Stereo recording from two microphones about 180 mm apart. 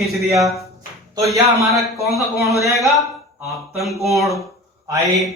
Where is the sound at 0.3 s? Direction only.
15° right (ahead or behind).